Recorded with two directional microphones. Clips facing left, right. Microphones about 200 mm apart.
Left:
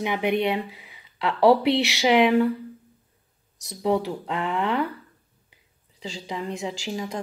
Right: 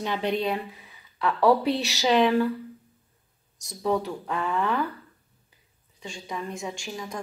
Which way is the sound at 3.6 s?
20° left (ahead or behind).